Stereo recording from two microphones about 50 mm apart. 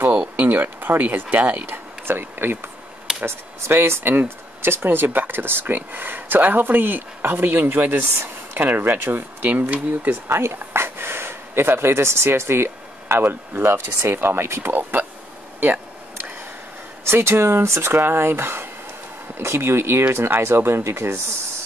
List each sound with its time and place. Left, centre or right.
0.4 s speech: right
1.7 s a sound: right
3.3 s speech: right
9.5 s speech: right
10.2 s speech: right
15.6 s a sound: right
17.0 s speech: right
17.9 s speech: right